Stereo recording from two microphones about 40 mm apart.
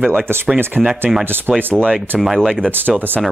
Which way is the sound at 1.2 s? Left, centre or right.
Right.